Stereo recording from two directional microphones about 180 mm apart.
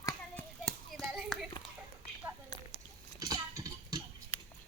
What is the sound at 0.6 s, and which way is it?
Clapping, centre (ahead or behind).